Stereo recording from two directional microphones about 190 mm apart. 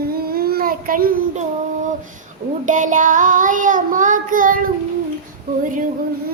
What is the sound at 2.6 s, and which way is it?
A child's voice, 40° right (ahead or behind).